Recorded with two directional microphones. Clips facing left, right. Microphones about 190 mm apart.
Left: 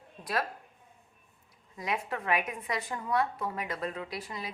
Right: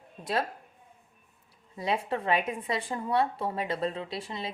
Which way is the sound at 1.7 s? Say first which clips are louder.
Right 4 dB; 30° right (ahead or behind).